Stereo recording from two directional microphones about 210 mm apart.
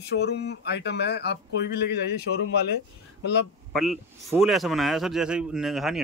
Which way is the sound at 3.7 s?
Centre (ahead or behind).